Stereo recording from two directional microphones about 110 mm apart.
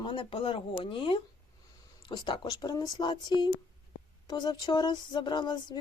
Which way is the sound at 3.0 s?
45° left (ahead or behind).